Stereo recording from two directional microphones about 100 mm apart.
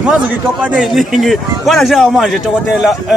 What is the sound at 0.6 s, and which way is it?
Speech, 5° right (ahead or behind).